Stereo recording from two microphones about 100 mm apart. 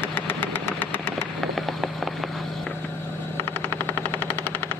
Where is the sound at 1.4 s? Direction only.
Centre (ahead or behind).